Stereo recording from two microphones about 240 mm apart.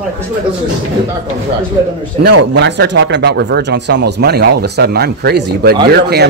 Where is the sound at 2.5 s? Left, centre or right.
Right.